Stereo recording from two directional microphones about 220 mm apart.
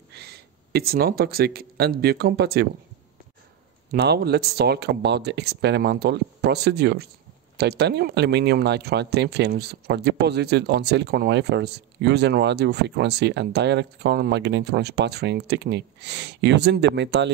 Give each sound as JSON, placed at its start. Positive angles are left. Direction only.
{"t": 0.1, "sound": "speech", "side_deg": -45}
{"t": 3.9, "sound": "speech", "side_deg": -50}